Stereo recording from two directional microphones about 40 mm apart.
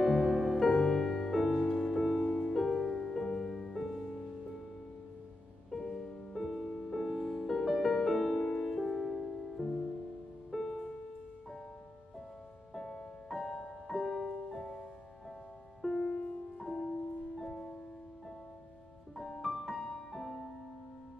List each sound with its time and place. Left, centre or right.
0.0 s music: centre
0.7 s music: centre
1.7 s music: centre
5.7 s music: centre
8.4 s music: centre
8.8 s music: centre
10.5 s music: centre
12.7 s music: centre
19.1 s music: centre